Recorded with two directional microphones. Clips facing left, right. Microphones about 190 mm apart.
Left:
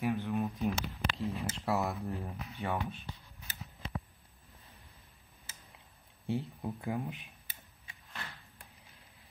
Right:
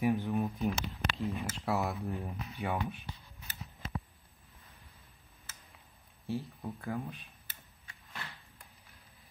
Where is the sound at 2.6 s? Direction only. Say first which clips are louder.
Even; 15° right (ahead or behind).